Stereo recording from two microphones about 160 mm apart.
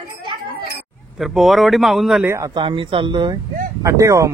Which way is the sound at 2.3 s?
25° right (ahead or behind).